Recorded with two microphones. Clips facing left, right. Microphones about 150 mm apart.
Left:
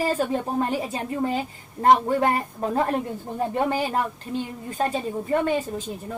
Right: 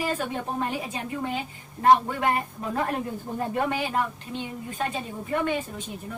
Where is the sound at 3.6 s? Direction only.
35° left (ahead or behind).